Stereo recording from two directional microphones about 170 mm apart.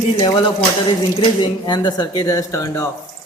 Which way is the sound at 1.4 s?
25° left (ahead or behind).